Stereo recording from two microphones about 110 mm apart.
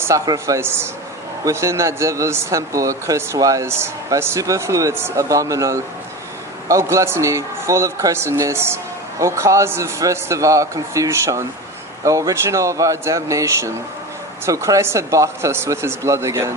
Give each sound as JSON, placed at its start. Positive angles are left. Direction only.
{"t": 0.1, "sound": "speech", "side_deg": -30}